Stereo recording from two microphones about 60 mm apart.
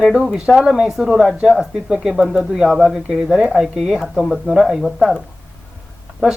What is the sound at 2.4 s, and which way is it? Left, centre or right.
Speech, centre.